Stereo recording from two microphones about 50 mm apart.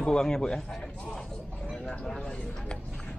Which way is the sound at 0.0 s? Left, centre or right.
Centre.